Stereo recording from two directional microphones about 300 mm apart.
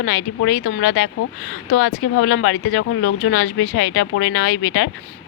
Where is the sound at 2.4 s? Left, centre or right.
Left.